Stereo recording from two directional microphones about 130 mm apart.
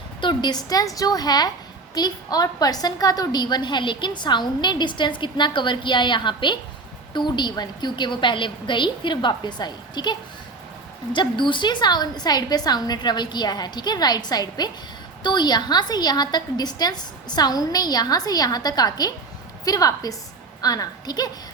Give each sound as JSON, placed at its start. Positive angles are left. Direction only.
{"t": 0.2, "sound": "a woman's voice", "side_deg": 35}